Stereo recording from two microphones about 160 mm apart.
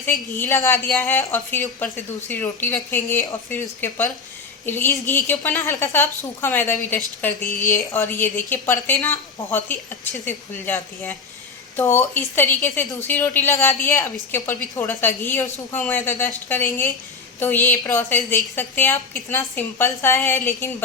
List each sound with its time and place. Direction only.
0.3 s a woman's voice: 15° left (ahead or behind)